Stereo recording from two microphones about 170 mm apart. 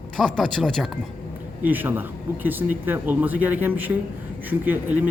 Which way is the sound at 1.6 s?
10° right (ahead or behind).